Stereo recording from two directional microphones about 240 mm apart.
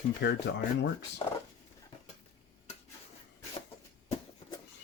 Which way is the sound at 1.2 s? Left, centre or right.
Left.